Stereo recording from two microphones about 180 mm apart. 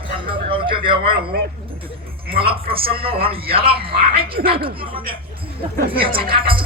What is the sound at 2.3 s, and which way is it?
Speech, 30° right (ahead or behind).